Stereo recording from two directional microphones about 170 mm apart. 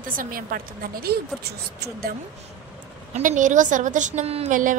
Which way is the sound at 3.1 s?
45° right (ahead or behind).